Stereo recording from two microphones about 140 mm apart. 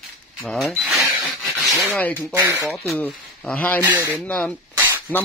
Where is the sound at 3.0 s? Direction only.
10° left (ahead or behind).